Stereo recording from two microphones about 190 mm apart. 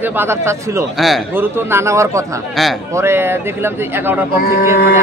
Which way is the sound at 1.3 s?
10° right (ahead or behind).